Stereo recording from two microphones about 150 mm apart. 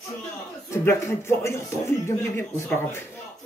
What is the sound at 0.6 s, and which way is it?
Speech, 20° left (ahead or behind).